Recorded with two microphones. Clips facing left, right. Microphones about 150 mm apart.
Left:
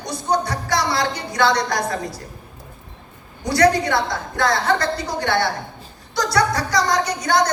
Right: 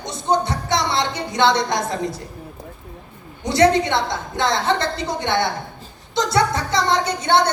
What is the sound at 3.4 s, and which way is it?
A woman's voice, 25° right (ahead or behind).